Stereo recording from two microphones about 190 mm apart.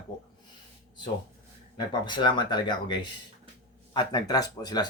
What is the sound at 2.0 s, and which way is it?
Speech, 25° left (ahead or behind).